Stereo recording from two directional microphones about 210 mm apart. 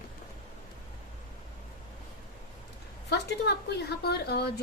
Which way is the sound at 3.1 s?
55° left (ahead or behind).